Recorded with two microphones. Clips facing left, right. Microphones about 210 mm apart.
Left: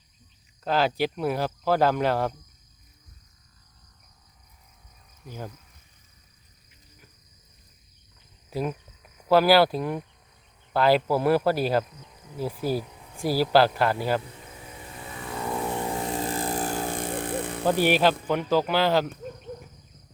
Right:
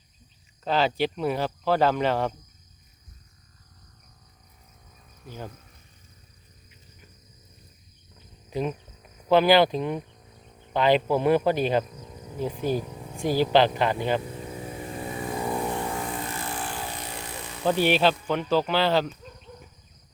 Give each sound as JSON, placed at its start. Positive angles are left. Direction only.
{"t": 0.6, "sound": "speech", "side_deg": 5}
{"t": 8.4, "sound": "speech", "side_deg": 5}
{"t": 14.7, "sound": "vehicle", "side_deg": -35}
{"t": 15.2, "sound": "vehicle", "side_deg": -15}
{"t": 15.6, "sound": "vehicle", "side_deg": 5}
{"t": 16.0, "sound": "a sound", "side_deg": 30}
{"t": 17.7, "sound": "speech", "side_deg": 10}
{"t": 19.1, "sound": "cricket", "side_deg": 55}